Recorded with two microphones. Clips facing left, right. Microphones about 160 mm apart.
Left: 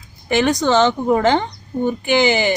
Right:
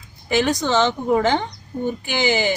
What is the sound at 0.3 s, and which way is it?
A woman's voice, 60° left (ahead or behind).